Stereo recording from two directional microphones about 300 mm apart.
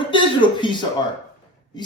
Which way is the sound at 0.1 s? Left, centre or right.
Centre.